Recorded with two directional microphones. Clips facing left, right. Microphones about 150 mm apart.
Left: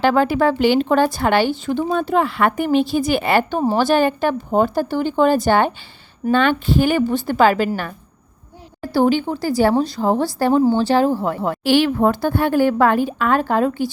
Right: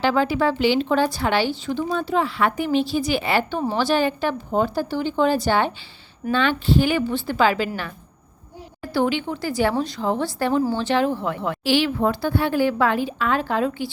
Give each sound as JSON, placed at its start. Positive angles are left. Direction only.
{"t": 0.0, "sound": "speech", "side_deg": 50}
{"t": 8.8, "sound": "speech", "side_deg": 40}